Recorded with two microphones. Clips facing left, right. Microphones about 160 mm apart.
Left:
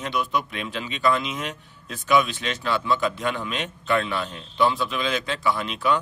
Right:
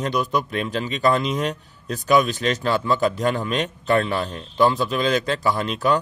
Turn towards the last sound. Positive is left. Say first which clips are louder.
# right 3 dB
turn(degrees=-40)  # may be behind; listen again after turning